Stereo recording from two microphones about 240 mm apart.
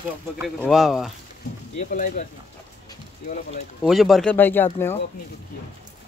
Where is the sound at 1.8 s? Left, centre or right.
Left.